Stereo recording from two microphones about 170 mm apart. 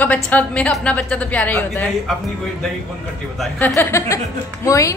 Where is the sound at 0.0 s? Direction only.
10° left (ahead or behind).